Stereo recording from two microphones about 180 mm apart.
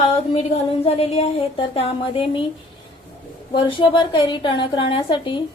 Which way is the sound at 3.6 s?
30° left (ahead or behind).